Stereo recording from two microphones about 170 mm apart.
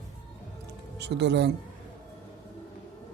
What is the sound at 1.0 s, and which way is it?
Speech, 90° right.